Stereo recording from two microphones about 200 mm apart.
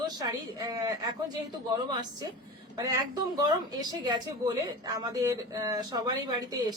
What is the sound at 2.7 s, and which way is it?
A woman's voice, 20° right (ahead or behind).